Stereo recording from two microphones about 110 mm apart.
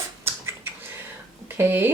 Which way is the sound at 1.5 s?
20° right (ahead or behind).